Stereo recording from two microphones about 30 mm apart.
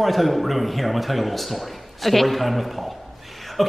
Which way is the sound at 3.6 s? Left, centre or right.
Centre.